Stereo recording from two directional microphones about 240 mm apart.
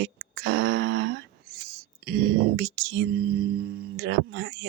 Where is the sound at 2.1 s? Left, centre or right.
Right.